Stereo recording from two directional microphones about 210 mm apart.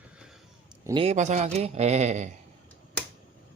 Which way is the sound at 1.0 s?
35° right (ahead or behind).